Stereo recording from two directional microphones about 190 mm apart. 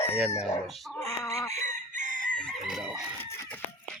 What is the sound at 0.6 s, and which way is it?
Speech, centre (ahead or behind).